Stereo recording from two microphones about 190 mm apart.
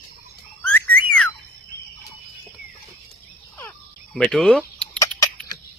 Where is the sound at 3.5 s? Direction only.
5° left (ahead or behind).